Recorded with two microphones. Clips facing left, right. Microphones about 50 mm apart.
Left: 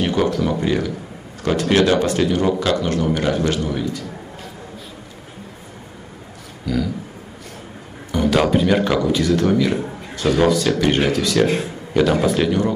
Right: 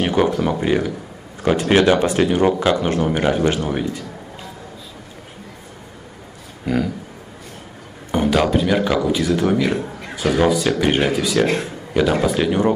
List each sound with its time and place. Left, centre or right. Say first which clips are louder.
0.0 s speech: right 1 dB; right
3.6 s a man's voice: right 1 dB; right
6.6 s speech: right 2 dB; right
8.3 s a man's voice: left 2 dB; centre
9.1 s a man's voice: left 1 dB; centre
12.4 s speech: right 2 dB; right